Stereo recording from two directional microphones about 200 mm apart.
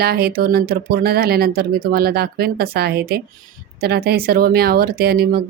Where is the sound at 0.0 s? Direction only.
50° right (ahead or behind).